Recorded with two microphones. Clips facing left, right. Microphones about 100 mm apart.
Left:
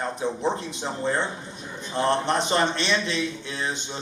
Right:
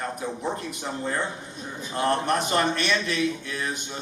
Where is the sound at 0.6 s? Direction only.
25° left (ahead or behind).